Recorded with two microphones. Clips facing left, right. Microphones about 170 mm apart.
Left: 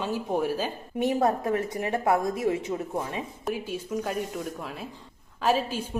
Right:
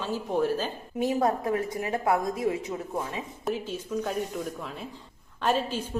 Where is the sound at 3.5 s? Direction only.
10° left (ahead or behind).